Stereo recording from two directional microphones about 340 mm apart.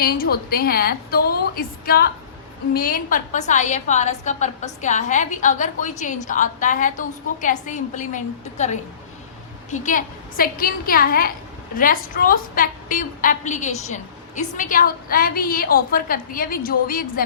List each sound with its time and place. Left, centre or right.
0.0 s a woman's voice: left